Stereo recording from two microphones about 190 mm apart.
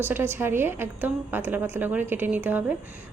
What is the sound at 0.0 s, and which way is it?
A woman's voice, 10° right (ahead or behind).